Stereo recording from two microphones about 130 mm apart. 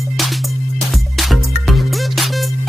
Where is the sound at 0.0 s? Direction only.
Centre (ahead or behind).